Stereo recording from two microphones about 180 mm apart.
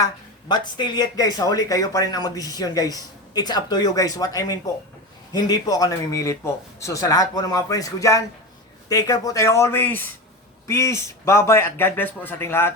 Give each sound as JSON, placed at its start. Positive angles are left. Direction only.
{"t": 0.0, "sound": "speech", "side_deg": 25}